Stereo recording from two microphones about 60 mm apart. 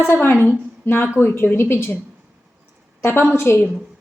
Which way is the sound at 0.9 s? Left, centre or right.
Left.